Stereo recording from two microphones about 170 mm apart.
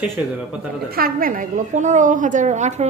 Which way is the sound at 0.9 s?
55° right (ahead or behind).